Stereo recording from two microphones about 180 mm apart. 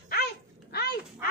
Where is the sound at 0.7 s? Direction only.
60° left (ahead or behind).